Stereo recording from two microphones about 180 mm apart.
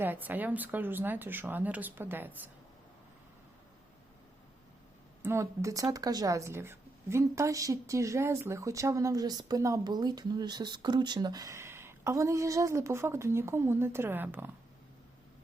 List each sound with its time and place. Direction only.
0.0 s speech: 10° right (ahead or behind)
5.2 s speech: 15° right (ahead or behind)